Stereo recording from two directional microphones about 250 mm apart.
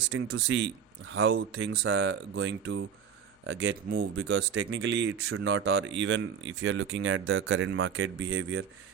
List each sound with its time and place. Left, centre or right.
0.1 s speech: right